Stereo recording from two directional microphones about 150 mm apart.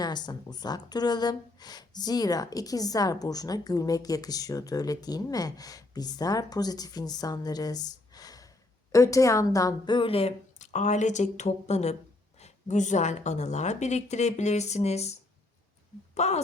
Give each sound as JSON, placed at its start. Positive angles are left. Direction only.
{"t": 0.0, "sound": "a woman's voice", "side_deg": 30}
{"t": 16.1, "sound": "a woman's voice", "side_deg": 45}